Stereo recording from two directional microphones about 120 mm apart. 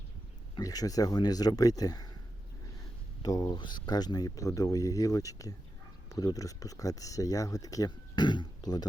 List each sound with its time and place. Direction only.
0.5 s speech: 30° left (ahead or behind)
3.2 s speech: 30° left (ahead or behind)